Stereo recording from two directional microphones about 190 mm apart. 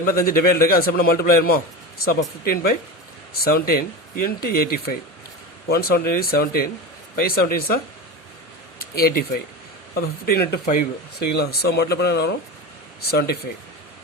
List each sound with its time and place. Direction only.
0.0 s speech: 50° left (ahead or behind)
8.8 s speech: 50° left (ahead or behind)